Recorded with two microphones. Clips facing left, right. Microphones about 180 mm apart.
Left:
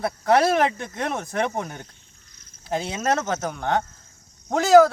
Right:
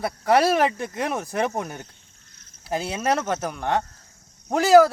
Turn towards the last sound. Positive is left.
turn(degrees=-10)  # may be behind; listen again after turning